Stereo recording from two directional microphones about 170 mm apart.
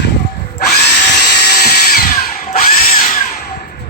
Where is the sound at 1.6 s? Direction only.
60° left (ahead or behind).